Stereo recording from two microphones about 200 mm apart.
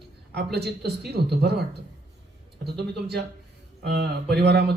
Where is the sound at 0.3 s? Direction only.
55° right (ahead or behind).